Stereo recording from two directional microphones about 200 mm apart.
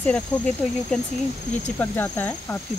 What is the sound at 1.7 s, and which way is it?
Speech, 10° left (ahead or behind).